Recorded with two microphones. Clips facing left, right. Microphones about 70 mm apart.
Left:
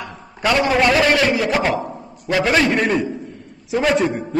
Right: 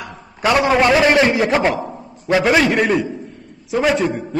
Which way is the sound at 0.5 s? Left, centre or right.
Right.